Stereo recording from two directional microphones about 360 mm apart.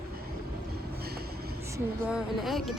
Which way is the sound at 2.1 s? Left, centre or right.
Centre.